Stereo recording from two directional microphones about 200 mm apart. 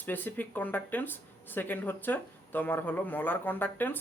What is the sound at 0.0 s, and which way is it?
Speech, 10° left (ahead or behind).